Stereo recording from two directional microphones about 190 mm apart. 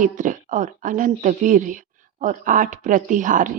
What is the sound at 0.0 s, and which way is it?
Speech, 40° right (ahead or behind).